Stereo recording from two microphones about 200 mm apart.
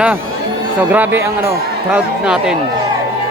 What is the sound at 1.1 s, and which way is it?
A man's voice, 10° right (ahead or behind).